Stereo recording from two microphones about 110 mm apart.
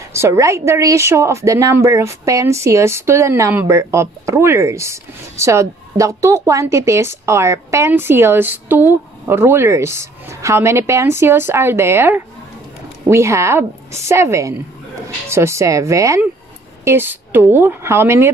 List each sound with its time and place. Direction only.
0.1 s a woman's voice: 25° right (ahead or behind)